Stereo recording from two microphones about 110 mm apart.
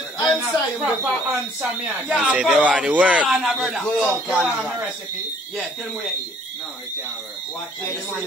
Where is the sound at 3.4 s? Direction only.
Centre (ahead or behind).